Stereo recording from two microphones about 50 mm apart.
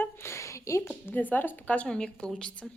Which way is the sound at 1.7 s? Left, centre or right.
Left.